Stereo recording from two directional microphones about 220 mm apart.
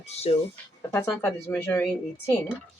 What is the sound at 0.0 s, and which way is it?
Speech, 30° left (ahead or behind).